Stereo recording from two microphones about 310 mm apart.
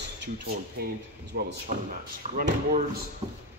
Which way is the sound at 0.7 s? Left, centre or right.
Right.